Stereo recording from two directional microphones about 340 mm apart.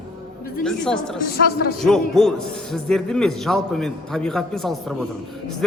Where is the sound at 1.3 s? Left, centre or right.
Left.